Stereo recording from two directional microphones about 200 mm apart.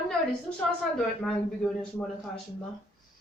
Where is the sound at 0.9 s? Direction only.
5° left (ahead or behind).